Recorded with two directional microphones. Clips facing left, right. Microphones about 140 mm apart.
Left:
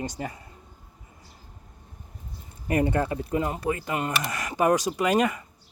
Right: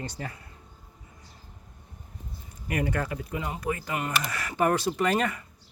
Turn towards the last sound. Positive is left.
turn(degrees=15)  # may be behind; listen again after turning